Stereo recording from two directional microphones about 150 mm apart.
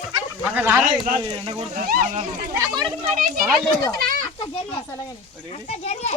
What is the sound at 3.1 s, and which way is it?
Speech, 60° right (ahead or behind).